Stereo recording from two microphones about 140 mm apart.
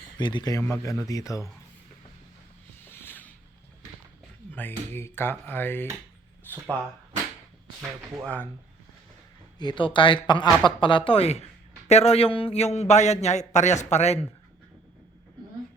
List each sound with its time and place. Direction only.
0.2 s speech: 35° left (ahead or behind)
2.8 s a sound: 15° left (ahead or behind)
4.5 s speech: 15° left (ahead or behind)
9.6 s a man's voice: 35° left (ahead or behind); by 14.3 s 50° left (ahead or behind)